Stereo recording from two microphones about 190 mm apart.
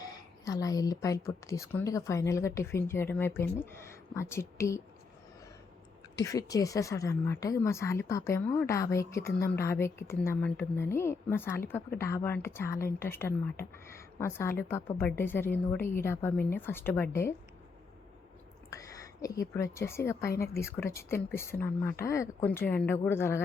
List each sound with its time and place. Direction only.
0.0 s speech: 20° left (ahead or behind)
6.1 s speech: 20° left (ahead or behind)
19.2 s speech: 15° left (ahead or behind)